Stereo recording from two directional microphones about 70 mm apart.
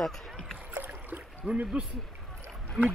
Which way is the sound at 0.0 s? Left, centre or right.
Centre.